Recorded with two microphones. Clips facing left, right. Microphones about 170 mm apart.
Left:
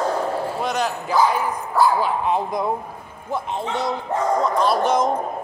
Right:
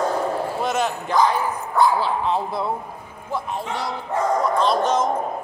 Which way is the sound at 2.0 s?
15° left (ahead or behind).